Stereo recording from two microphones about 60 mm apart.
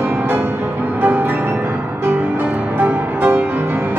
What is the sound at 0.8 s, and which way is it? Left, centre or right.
Music, right.